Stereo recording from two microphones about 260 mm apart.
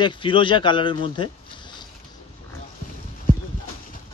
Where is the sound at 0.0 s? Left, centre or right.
Centre.